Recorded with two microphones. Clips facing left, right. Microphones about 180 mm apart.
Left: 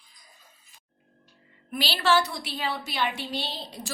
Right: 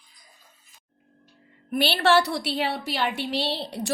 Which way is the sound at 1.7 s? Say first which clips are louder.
Right 4 dB; 60° right (ahead or behind).